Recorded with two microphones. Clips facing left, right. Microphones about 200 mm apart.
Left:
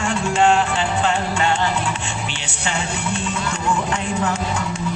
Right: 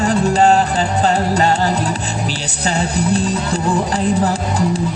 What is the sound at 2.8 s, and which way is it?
Music, 35° right (ahead or behind).